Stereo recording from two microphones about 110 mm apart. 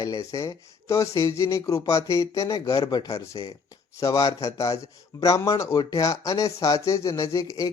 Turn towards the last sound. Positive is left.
turn(degrees=30)  # may be behind; listen again after turning